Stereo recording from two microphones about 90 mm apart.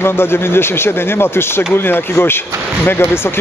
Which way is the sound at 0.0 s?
25° left (ahead or behind).